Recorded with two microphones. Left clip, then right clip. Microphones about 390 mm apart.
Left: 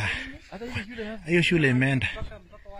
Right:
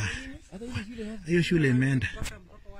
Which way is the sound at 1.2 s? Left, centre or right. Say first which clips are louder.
Left 4 dB; centre.